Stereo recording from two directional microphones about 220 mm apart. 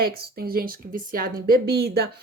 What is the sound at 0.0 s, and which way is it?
Speech, 45° right (ahead or behind).